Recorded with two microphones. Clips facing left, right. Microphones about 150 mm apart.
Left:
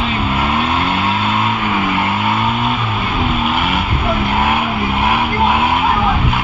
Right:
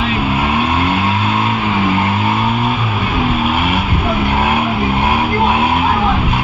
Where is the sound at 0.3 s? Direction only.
20° right (ahead or behind).